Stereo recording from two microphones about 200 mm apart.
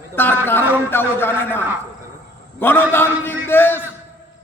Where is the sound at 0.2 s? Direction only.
10° left (ahead or behind).